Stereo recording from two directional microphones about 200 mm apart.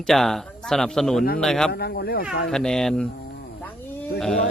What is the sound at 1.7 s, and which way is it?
Speech, 50° left (ahead or behind).